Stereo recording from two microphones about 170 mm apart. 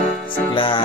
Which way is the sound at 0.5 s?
30° left (ahead or behind).